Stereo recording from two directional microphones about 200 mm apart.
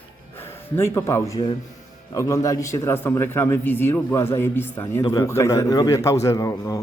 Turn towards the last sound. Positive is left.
turn(degrees=15)  # may be behind; listen again after turning